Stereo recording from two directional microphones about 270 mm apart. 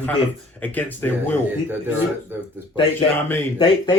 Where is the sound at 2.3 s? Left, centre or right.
Centre.